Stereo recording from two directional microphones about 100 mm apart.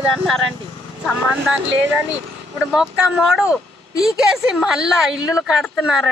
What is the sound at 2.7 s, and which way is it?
Speech, 5° right (ahead or behind).